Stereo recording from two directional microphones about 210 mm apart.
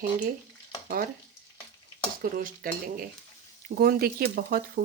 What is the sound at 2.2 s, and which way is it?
Speech, 40° right (ahead or behind).